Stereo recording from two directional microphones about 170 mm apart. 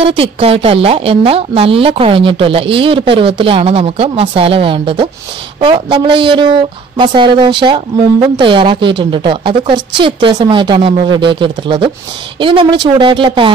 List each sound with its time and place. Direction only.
0.0 s a woman's voice: 35° right (ahead or behind)